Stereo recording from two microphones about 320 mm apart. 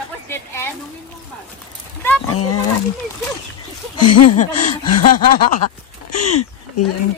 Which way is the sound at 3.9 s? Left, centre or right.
Left.